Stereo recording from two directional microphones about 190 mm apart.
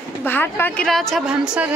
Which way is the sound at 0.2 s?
10° left (ahead or behind).